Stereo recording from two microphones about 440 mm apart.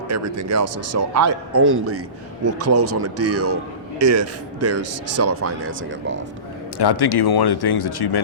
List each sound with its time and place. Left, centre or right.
0.1 s a man's voice: right
6.7 s speech: left